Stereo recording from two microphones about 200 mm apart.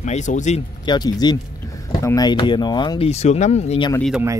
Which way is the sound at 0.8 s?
20° left (ahead or behind).